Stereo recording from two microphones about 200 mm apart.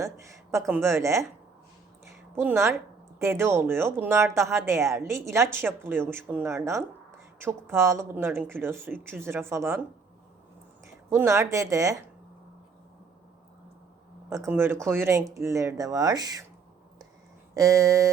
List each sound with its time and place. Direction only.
0.0 s speech: 15° right (ahead or behind)
2.3 s speech: 10° right (ahead or behind)
11.1 s speech: 15° right (ahead or behind)
14.3 s speech: 15° right (ahead or behind)
17.5 s speech: 15° right (ahead or behind)